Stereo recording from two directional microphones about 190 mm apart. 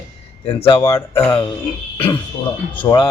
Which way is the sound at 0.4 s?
25° left (ahead or behind).